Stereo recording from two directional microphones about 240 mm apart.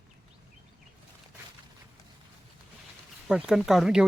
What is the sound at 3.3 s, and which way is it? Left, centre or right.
Speech, centre.